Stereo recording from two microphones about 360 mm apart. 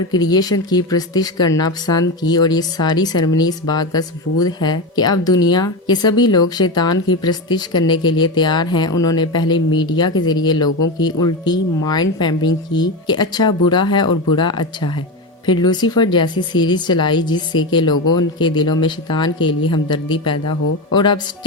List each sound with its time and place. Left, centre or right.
0.1 s speech: centre
18.0 s speech: left
18.3 s speech: centre